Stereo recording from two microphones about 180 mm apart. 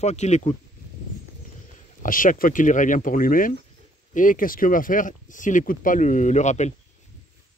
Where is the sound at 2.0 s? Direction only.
50° left (ahead or behind).